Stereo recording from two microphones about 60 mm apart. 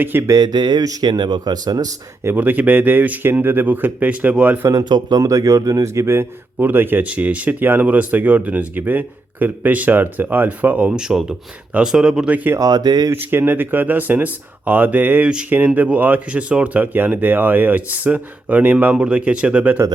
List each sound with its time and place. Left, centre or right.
0.0 s speech: right
0.3 s speech: right
2.2 s speech: right
4.6 s speech: right
6.6 s speech: right
7.0 s speech: right
10.9 s speech: centre
13.1 s speech: right